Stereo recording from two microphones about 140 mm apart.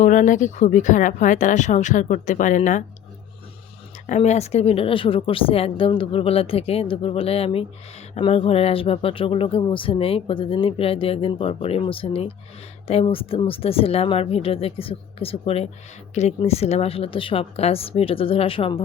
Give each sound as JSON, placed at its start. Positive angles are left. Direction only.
{"t": 0.0, "sound": "speech", "side_deg": 65}
{"t": 4.0, "sound": "a woman's voice", "side_deg": 55}